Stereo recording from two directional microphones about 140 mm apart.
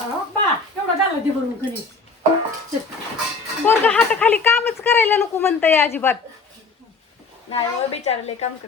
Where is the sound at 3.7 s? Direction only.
10° left (ahead or behind).